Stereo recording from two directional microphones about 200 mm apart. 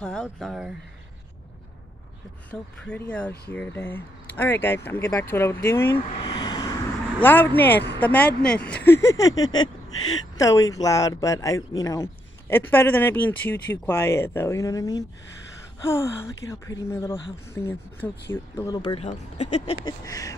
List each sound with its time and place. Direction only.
0.0 s speech: centre (ahead or behind)
2.8 s speech: 5° left (ahead or behind)
6.2 s vehicle: 25° left (ahead or behind)
7.2 s speech: 10° left (ahead or behind)
18.8 s speech: 25° left (ahead or behind)
19.0 s speech: 35° left (ahead or behind)
19.8 s speech: 15° left (ahead or behind)